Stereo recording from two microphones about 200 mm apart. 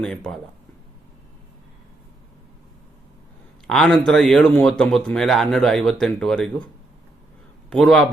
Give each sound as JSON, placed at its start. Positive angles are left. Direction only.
{"t": 3.7, "sound": "speech", "side_deg": 0}
{"t": 7.7, "sound": "speech", "side_deg": 5}